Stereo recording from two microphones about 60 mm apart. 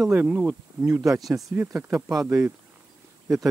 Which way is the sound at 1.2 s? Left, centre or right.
Centre.